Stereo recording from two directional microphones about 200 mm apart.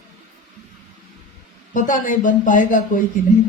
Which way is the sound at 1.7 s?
40° left (ahead or behind).